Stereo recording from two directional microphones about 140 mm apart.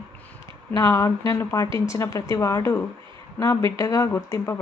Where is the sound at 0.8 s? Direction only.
20° left (ahead or behind).